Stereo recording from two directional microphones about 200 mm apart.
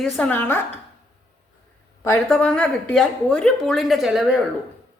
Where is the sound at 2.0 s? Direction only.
10° left (ahead or behind).